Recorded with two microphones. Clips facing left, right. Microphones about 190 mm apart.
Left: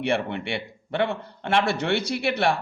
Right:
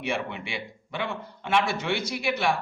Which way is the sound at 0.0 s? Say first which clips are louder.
Left 5 dB; 60° left (ahead or behind).